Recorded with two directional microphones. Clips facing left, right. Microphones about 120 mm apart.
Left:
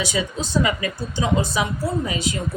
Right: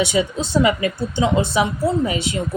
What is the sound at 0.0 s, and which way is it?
Speech, 25° right (ahead or behind).